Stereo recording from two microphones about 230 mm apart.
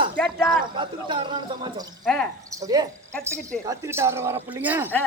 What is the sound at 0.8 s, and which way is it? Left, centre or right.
Speech, right.